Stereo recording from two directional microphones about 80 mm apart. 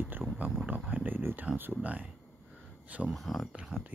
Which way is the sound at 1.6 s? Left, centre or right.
Centre.